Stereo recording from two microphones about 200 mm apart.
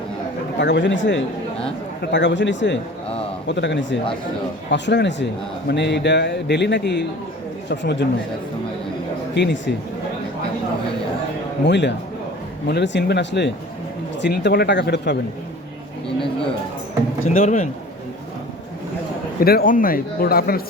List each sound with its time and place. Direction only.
0.6 s a man's voice: 60° left (ahead or behind)
9.3 s a man's voice: 60° left (ahead or behind)
11.6 s a man's voice: 60° left (ahead or behind)
17.2 s speech: 35° left (ahead or behind)
19.4 s speech: 50° left (ahead or behind)